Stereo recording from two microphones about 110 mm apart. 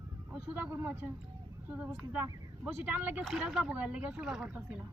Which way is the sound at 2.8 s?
20° right (ahead or behind).